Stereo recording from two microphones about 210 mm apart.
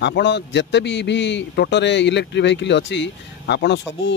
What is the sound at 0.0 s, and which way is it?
A man's voice, 55° left (ahead or behind).